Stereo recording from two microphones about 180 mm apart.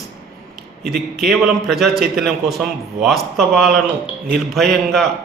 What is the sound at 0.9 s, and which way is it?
A man's voice, centre (ahead or behind).